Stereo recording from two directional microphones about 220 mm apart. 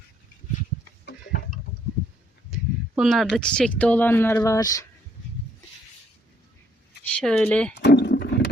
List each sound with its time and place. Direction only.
2.5 s speech: centre (ahead or behind); by 4.9 s 15° left (ahead or behind)
7.0 s speech: 5° left (ahead or behind)
7.8 s roaring cats: 50° left (ahead or behind)